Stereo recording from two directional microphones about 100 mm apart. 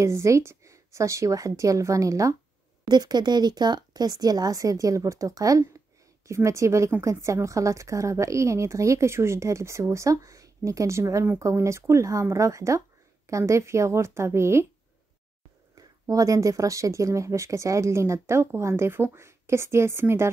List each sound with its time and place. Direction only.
0.0 s a woman's voice: 30° right (ahead or behind)
2.9 s a woman's voice: 45° right (ahead or behind); by 14.7 s 25° right (ahead or behind)
15.7 s speech: 35° right (ahead or behind)